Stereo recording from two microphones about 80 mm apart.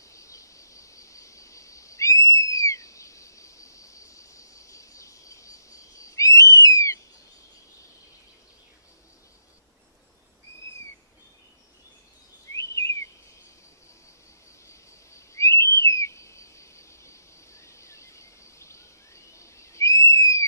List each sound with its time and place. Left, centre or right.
0.0 s a sound: left
12.5 s bird vocalization: left
14.7 s bird: left